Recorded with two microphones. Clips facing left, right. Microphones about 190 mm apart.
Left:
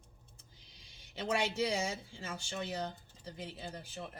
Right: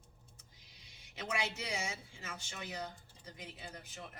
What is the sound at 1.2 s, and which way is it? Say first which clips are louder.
Speech: left 6 dB; 30° left (ahead or behind).